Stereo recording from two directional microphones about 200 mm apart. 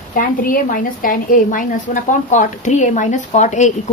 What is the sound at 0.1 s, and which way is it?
A woman's voice, 45° left (ahead or behind).